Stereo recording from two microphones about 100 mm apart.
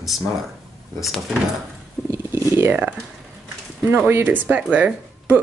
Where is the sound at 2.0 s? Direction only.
25° right (ahead or behind).